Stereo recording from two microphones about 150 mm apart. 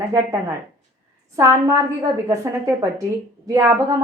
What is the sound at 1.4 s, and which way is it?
A woman's voice, 20° right (ahead or behind).